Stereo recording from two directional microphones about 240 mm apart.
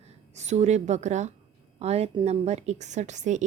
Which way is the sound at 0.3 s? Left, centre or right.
Right.